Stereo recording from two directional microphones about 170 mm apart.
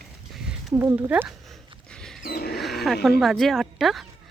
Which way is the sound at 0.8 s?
10° right (ahead or behind).